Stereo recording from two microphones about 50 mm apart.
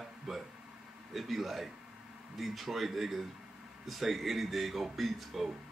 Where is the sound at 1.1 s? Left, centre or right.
Centre.